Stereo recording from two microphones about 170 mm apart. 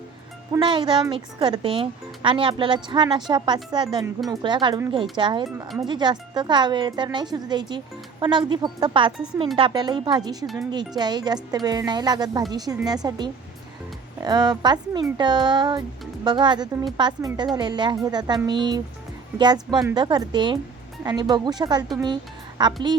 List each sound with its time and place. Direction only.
0.6 s speech: 30° right (ahead or behind)
10.4 s speech: centre (ahead or behind)
10.7 s speech: 25° right (ahead or behind)